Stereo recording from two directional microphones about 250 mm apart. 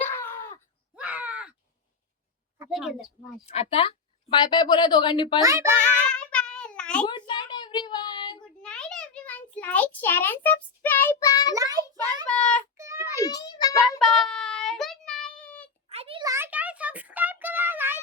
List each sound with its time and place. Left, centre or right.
0.0 s groan: centre
0.9 s groan: centre
2.6 s a woman's voice: centre
3.4 s speech: left
5.4 s a child's voice: centre
5.7 s child singing: centre
7.1 s a sound: centre
8.6 s a sound: centre
11.5 s child singing: centre
12.3 s child singing: centre
12.7 s child singing: centre
13.1 s a sound: centre
14.0 s child singing: centre
15.9 s music: right